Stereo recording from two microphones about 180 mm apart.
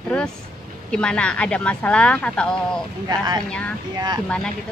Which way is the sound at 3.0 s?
20° right (ahead or behind).